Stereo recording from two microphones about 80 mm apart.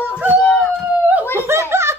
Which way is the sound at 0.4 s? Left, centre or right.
Centre.